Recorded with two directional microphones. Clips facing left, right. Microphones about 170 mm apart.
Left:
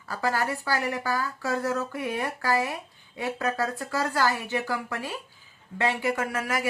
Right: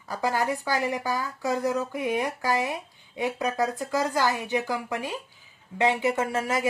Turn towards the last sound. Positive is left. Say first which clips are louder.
# right 2 dB
turn(degrees=-25)  # may be behind; listen again after turning